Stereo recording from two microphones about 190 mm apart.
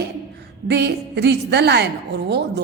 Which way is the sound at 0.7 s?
60° right (ahead or behind).